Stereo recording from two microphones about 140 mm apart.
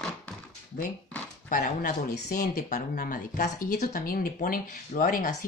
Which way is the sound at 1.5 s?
70° left (ahead or behind).